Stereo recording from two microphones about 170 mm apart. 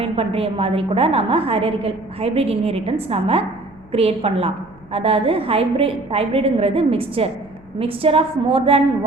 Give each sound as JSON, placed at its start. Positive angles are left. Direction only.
{"t": 0.0, "sound": "a woman's voice", "side_deg": -35}